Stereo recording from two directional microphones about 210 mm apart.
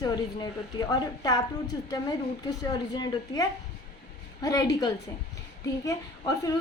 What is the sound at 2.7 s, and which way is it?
A woman's voice, 20° left (ahead or behind).